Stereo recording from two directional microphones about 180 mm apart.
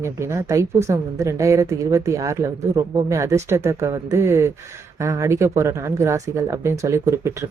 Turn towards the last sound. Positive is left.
turn(degrees=-15)  # may be behind; listen again after turning